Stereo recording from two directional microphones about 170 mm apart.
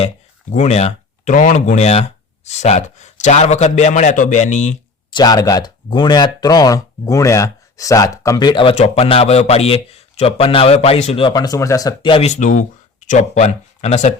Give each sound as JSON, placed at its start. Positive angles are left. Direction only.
{"t": 0.5, "sound": "speech", "side_deg": 40}
{"t": 5.1, "sound": "speech", "side_deg": 25}